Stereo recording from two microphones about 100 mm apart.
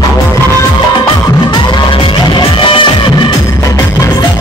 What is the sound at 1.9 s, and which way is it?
Music, 60° left (ahead or behind).